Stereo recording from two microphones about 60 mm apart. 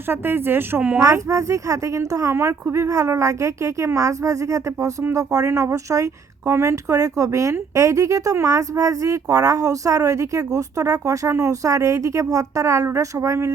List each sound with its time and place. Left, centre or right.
0.1 s speech: right
0.8 s speech: right
1.0 s speech: right
2.3 s a woman's voice: right
6.4 s speech: right